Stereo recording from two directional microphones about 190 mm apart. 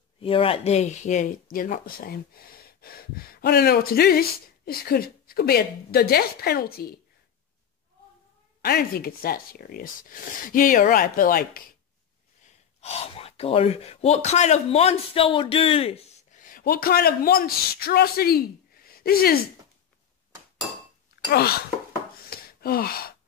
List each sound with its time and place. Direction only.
0.2 s speech: 30° left (ahead or behind); by 7.0 s 55° left (ahead or behind)
8.6 s speech: 55° left (ahead or behind)
12.8 s speech: 35° left (ahead or behind)
16.3 s speech: 45° left (ahead or behind)
21.3 s wail: 55° left (ahead or behind)
22.3 s gasp: 55° left (ahead or behind)